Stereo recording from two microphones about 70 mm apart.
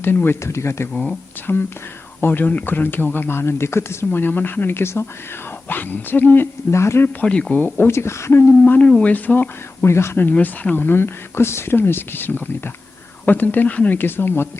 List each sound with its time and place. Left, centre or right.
0.0 s speech: left
1.5 s speech: left
7.2 s speech: centre
7.6 s speech: left
8.6 s speech: left
9.8 s speech: left
10.3 s speech: left